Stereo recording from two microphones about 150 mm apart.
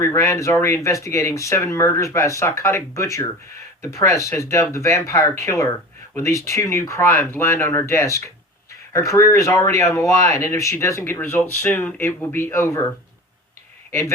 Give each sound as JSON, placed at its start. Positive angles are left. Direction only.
{"t": 0.0, "sound": "speech", "side_deg": 20}